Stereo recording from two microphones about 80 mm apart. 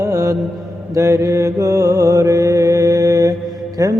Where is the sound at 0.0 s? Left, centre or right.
Right.